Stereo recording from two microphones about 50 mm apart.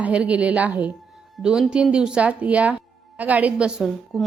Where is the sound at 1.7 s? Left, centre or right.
Centre.